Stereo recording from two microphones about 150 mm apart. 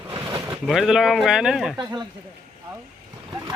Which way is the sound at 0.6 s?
Centre (ahead or behind).